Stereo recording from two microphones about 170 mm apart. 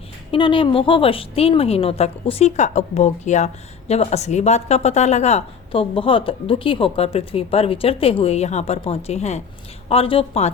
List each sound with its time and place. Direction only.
0.3 s a woman's voice: 30° left (ahead or behind)